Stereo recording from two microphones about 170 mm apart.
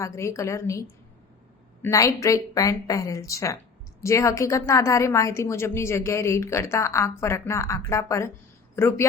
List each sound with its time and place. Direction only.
0.0 s a woman's voice: 15° left (ahead or behind)